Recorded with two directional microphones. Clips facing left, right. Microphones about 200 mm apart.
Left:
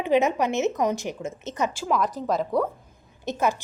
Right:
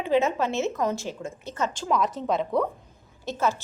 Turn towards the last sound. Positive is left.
turn(degrees=15)  # may be behind; listen again after turning